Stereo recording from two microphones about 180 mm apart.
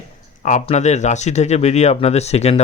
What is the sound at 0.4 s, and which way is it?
Speech, 40° left (ahead or behind).